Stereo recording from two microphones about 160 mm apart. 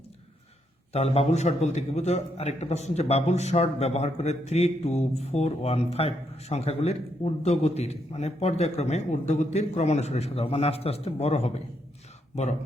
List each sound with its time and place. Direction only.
0.9 s a man's voice: 40° left (ahead or behind)